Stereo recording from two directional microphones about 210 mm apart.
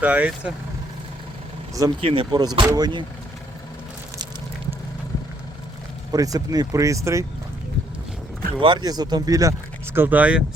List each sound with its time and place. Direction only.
0.0 s speech: 5° right (ahead or behind)
1.7 s speech: 15° right (ahead or behind)
6.1 s speech: 15° right (ahead or behind)
8.6 s speech: 20° right (ahead or behind)